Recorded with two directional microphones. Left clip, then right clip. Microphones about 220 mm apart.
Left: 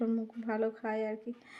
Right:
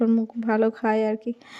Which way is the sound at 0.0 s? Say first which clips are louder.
Right 11 dB; 40° right (ahead or behind).